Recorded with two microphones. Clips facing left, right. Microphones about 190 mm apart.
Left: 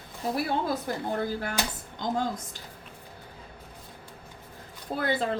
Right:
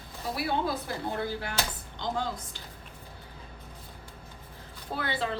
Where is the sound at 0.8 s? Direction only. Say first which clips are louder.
Left 3 dB; 45° left (ahead or behind).